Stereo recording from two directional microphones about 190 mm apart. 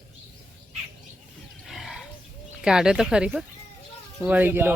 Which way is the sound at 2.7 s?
5° right (ahead or behind).